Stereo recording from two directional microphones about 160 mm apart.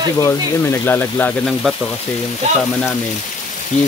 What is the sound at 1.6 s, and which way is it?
Speech, centre (ahead or behind).